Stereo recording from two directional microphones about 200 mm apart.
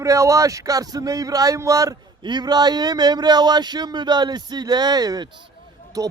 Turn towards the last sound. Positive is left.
turn(degrees=-15)  # may be behind; listen again after turning